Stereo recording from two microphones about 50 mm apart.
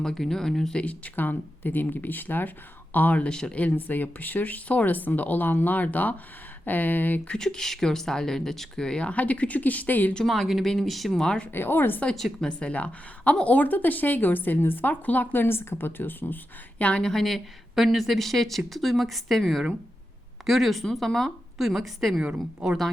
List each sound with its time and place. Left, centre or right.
0.0 s speech: centre
0.8 s a woman's voice: left
3.2 s speech: centre
3.8 s a woman's voice: left
7.3 s speech: centre; by 10.2 s left
10.2 s speech: centre
11.5 s speech: left
12.1 s speech: centre
12.5 s a woman's voice: left
16.7 s speech: left
17.0 s speech: centre
22.2 s a woman's voice: centre